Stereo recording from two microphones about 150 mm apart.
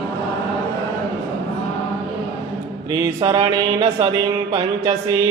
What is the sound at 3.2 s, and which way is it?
Mantra, 35° right (ahead or behind).